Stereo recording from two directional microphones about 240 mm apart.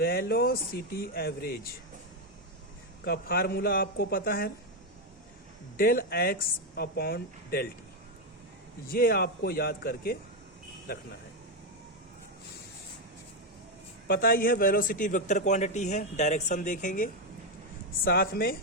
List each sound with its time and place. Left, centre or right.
0.0 s a man's voice: left
3.0 s a man's voice: left
5.7 s a man's voice: left
8.9 s a man's voice: left
14.1 s a man's voice: left